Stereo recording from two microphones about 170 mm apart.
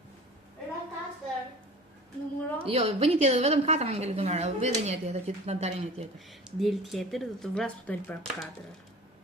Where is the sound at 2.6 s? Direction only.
35° right (ahead or behind).